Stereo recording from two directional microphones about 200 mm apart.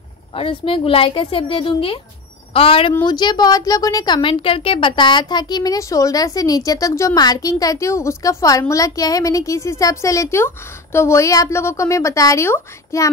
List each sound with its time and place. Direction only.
0.3 s a woman's voice: 25° left (ahead or behind)